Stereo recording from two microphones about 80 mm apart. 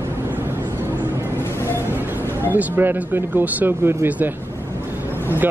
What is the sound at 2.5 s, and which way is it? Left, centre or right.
Speech, right.